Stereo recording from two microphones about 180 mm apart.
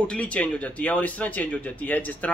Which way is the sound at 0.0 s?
5° left (ahead or behind).